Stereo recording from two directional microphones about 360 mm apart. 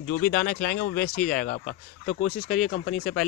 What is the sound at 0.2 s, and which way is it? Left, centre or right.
Speech, centre.